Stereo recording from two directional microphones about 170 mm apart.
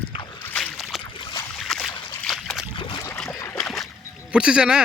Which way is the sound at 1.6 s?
Centre (ahead or behind).